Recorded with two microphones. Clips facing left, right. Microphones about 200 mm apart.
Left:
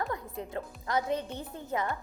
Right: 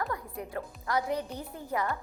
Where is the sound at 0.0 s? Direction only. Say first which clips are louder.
Even; 20° left (ahead or behind).